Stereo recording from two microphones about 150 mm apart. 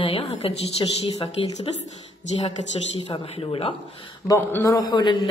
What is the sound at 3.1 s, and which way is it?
Speech, 40° left (ahead or behind).